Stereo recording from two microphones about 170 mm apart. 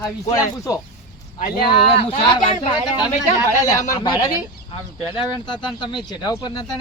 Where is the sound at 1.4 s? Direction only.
65° left (ahead or behind).